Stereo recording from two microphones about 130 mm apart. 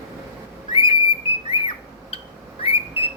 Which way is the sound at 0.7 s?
45° left (ahead or behind).